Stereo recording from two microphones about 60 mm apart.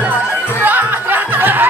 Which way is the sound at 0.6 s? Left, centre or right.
Right.